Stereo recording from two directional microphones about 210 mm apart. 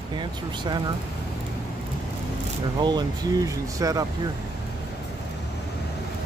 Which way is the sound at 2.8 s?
20° right (ahead or behind).